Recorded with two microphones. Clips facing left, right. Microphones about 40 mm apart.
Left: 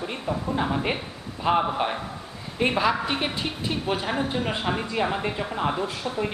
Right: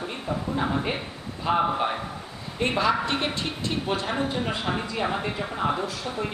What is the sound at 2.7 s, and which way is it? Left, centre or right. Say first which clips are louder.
Speech: right 2 dB; centre.